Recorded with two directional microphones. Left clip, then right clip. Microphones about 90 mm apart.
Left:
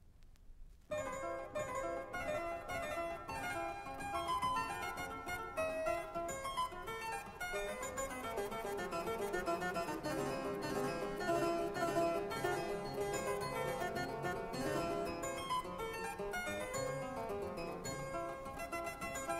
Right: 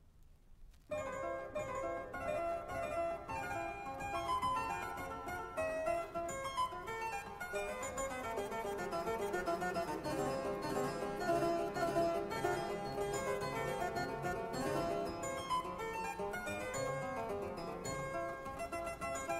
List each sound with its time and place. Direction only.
1.8 s music: 40° left (ahead or behind)
7.5 s music: 30° left (ahead or behind)
16.4 s music: 30° left (ahead or behind)